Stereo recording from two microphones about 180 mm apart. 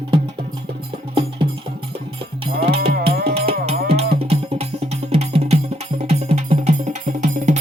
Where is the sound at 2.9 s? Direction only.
60° right (ahead or behind).